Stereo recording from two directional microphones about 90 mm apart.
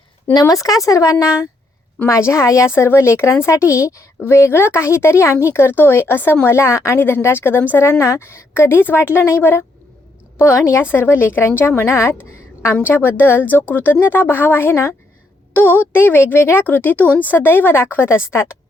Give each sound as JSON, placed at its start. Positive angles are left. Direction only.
{"t": 0.3, "sound": "speech", "side_deg": 40}